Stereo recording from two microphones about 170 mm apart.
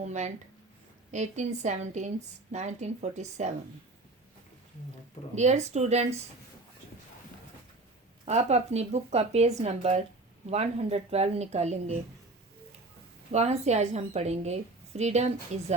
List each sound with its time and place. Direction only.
0.0 s speech: 45° right (ahead or behind)
5.3 s a woman's voice: 40° right (ahead or behind)
8.2 s a woman's voice: 40° right (ahead or behind)
13.3 s a woman's voice: 40° right (ahead or behind)